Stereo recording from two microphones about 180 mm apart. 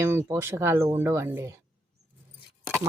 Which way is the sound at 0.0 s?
15° right (ahead or behind).